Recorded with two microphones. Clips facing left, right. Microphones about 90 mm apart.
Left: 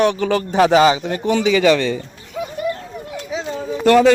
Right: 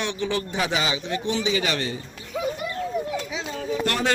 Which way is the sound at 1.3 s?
80° left.